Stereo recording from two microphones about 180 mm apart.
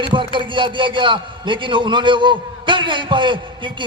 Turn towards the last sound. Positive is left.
turn(degrees=-25)  # may be behind; listen again after turning